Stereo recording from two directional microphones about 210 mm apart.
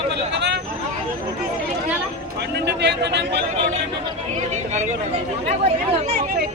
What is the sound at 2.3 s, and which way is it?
Music, 55° right (ahead or behind).